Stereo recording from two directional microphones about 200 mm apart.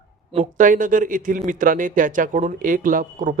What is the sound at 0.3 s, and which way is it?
A man's voice, 40° right (ahead or behind).